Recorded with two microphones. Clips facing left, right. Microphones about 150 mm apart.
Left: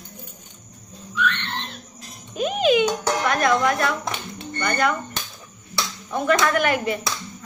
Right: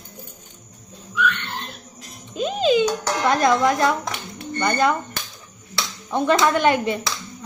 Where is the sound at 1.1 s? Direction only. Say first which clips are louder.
Right 2 dB; 5° right (ahead or behind).